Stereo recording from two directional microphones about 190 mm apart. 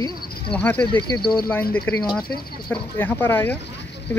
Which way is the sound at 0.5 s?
5° left (ahead or behind).